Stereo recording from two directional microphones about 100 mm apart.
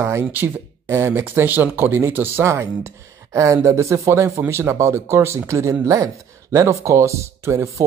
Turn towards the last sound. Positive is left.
turn(degrees=-30)  # may be behind; listen again after turning